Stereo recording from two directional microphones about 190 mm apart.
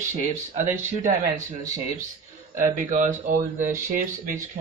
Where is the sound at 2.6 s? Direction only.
45° right (ahead or behind).